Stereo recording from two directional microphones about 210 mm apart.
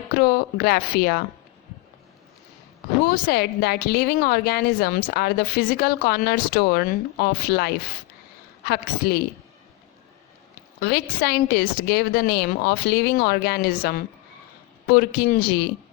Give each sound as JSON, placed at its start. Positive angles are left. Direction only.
{"t": 0.1, "sound": "a woman's voice", "side_deg": 45}
{"t": 3.0, "sound": "a woman's voice", "side_deg": 50}
{"t": 10.8, "sound": "a woman's voice", "side_deg": 45}